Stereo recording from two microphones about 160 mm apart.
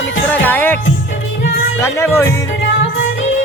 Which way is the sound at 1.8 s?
15° left (ahead or behind).